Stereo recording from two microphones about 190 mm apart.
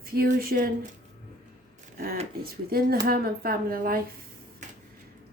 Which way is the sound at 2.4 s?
50° right (ahead or behind).